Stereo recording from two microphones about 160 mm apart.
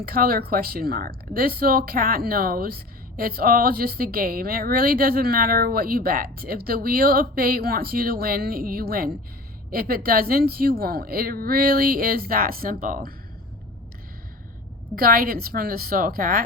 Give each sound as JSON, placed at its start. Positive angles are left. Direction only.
{"t": 0.0, "sound": "speech", "side_deg": -70}
{"t": 14.9, "sound": "a woman's voice", "side_deg": -65}